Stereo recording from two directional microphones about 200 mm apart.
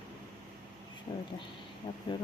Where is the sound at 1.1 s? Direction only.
25° left (ahead or behind).